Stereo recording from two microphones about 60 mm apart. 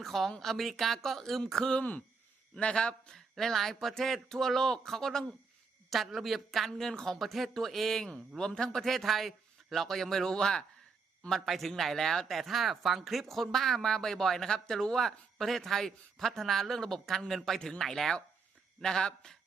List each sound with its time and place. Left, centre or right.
0.0 s speech: centre
1.8 s speech: left; by 19.4 s centre